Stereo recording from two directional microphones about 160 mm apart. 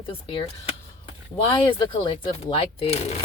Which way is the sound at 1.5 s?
30° left (ahead or behind).